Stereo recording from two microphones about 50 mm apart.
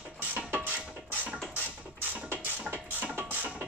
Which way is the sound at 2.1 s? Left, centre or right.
Right.